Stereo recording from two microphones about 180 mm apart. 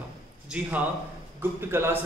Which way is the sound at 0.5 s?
10° right (ahead or behind).